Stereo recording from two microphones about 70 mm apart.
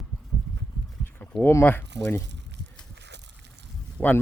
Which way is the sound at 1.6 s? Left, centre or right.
Left.